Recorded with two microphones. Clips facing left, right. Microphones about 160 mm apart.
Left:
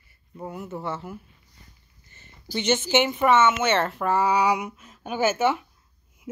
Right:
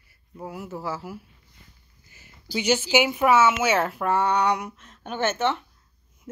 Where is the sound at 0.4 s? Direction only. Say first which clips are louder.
Left 1 dB; centre (ahead or behind).